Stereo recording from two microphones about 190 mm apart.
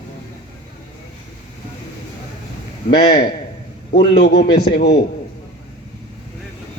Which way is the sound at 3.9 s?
60° left (ahead or behind).